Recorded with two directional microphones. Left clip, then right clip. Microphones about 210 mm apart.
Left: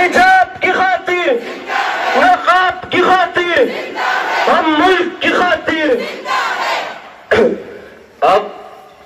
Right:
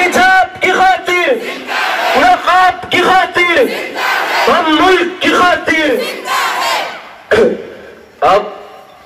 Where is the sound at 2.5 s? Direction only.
55° right (ahead or behind).